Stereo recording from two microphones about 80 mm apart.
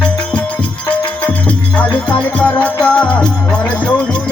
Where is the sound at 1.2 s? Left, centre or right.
Centre.